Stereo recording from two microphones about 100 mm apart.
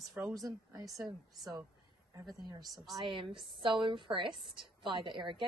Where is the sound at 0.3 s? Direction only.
40° right (ahead or behind).